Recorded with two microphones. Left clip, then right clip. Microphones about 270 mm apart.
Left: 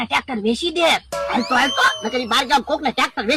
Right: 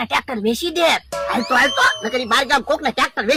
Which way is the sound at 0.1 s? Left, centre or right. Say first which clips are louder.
Even; right.